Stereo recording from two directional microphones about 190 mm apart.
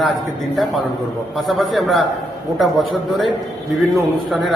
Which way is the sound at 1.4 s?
Centre (ahead or behind).